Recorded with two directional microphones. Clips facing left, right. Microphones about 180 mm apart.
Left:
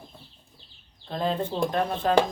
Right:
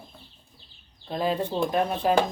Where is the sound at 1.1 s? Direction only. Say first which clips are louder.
Right 1 dB; 10° right (ahead or behind).